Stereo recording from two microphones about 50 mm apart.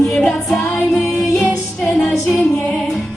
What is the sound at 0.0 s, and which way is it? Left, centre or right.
Music, centre.